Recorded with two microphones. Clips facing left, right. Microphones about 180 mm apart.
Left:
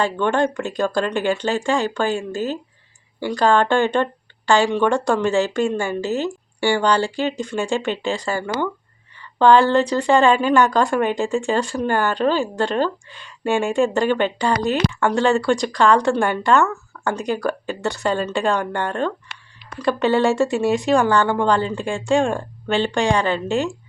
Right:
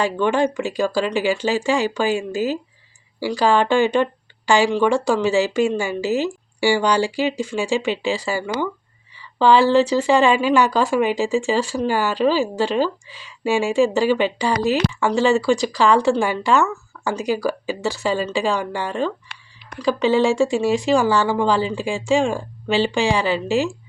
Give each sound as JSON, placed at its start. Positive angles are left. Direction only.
{"t": 0.0, "sound": "a woman's voice", "side_deg": -5}